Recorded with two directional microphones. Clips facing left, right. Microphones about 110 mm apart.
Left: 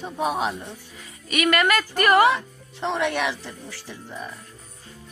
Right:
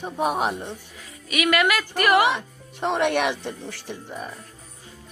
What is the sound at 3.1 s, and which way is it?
Speech, 60° right (ahead or behind).